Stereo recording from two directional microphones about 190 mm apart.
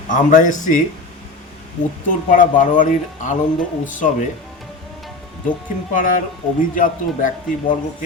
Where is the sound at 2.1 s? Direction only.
45° left (ahead or behind).